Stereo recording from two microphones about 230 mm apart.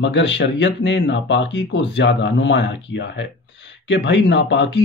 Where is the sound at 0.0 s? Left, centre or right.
Left.